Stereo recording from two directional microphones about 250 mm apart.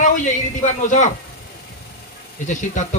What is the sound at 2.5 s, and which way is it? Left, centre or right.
Speech, left.